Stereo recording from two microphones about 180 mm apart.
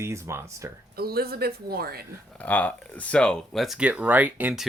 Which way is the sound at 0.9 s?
60° right (ahead or behind).